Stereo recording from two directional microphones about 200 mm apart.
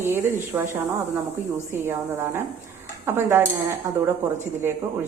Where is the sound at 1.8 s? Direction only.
10° right (ahead or behind).